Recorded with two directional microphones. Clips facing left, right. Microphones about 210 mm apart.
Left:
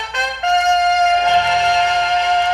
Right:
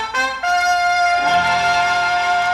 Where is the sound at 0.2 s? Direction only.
20° left (ahead or behind).